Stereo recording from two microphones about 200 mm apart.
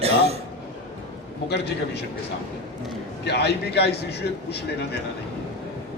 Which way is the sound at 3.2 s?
55° left (ahead or behind).